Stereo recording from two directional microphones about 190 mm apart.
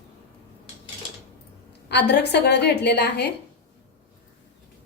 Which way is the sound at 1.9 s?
65° left (ahead or behind).